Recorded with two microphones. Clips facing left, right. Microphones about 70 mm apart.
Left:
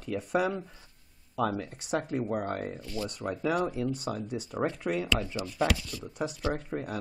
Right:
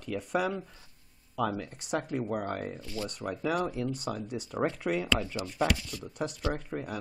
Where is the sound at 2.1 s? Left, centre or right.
Centre.